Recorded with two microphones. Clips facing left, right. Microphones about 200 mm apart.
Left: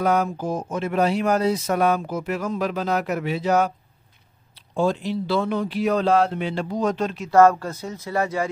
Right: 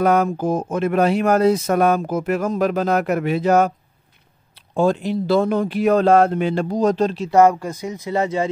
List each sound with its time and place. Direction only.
0.0 s speech: 55° right (ahead or behind); by 7.2 s 35° right (ahead or behind)
7.2 s speech: 15° right (ahead or behind)